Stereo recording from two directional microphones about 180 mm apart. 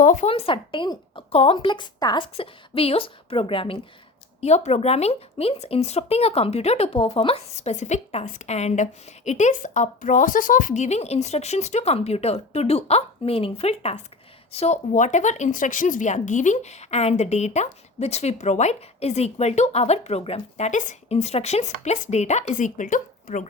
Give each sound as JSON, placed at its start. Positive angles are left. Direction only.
{"t": 0.0, "sound": "speech", "side_deg": 45}
{"t": 0.3, "sound": "speech", "side_deg": 30}